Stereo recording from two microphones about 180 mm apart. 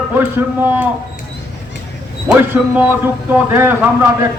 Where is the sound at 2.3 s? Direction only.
10° right (ahead or behind).